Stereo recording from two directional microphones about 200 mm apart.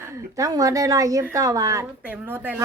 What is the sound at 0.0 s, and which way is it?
Speech, 15° right (ahead or behind).